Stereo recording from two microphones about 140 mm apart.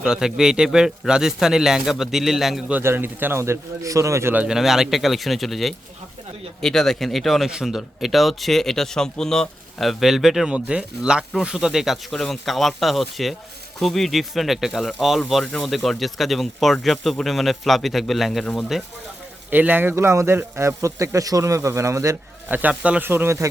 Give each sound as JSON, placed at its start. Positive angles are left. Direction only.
{"t": 0.0, "sound": "a man's voice", "side_deg": -5}
{"t": 4.4, "sound": "a man's voice", "side_deg": -5}
{"t": 19.5, "sound": "speech", "side_deg": -15}